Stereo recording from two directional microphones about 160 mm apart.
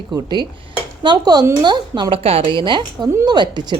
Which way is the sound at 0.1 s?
25° right (ahead or behind).